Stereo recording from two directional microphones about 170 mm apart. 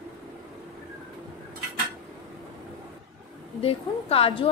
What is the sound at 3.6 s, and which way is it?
Speech, 35° left (ahead or behind).